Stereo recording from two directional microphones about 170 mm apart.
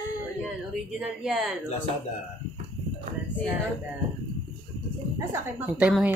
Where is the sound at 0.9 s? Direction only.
5° right (ahead or behind).